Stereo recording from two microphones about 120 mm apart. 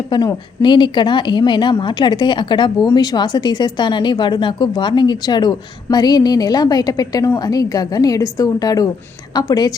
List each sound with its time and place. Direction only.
0.1 s a woman's voice: 30° left (ahead or behind)
0.6 s speech: 40° left (ahead or behind)